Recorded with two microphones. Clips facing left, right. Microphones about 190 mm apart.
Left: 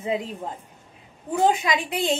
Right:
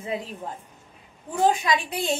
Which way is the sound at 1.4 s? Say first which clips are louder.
Even; 20° left (ahead or behind).